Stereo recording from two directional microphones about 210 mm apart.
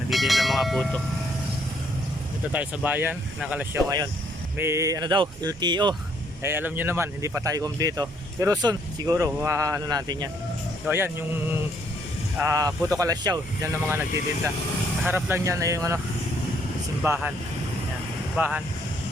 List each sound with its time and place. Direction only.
0.1 s speech: centre (ahead or behind)
2.5 s speech: 5° right (ahead or behind)
6.4 s speech: 10° right (ahead or behind)
12.4 s speech: 15° right (ahead or behind)
15.0 s speech: 10° right (ahead or behind)
17.0 s speech: 5° right (ahead or behind)
18.3 s speech: 5° right (ahead or behind)